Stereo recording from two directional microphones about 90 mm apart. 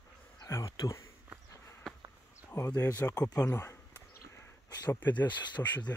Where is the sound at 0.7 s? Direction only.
40° left (ahead or behind).